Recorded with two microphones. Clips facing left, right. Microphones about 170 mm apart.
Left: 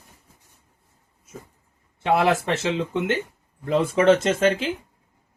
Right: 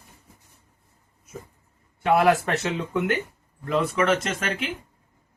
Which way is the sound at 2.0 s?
25° left (ahead or behind).